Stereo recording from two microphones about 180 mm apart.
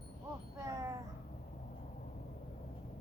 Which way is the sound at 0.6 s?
15° right (ahead or behind).